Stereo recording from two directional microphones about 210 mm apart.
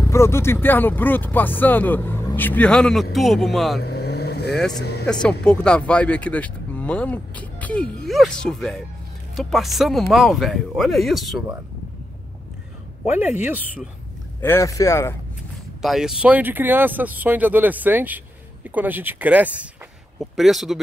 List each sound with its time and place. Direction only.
0.1 s speech: 15° left (ahead or behind)
3.8 s vehicle: 50° left (ahead or behind)
4.5 s speech: centre (ahead or behind)
13.0 s speech: 10° right (ahead or behind)
14.4 s speech: 15° left (ahead or behind)
15.8 s speech: centre (ahead or behind)